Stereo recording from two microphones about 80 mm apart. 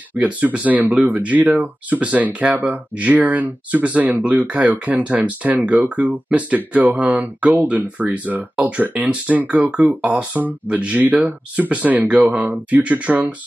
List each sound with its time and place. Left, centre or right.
0.1 s speech: centre